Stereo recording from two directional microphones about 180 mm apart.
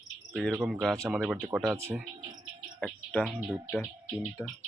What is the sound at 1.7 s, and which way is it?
Insect, 15° right (ahead or behind).